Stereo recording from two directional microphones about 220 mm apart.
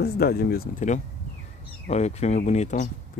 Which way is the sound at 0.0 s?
45° left (ahead or behind).